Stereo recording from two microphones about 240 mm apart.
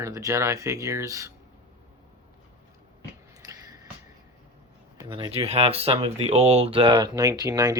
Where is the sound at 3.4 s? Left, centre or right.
Centre.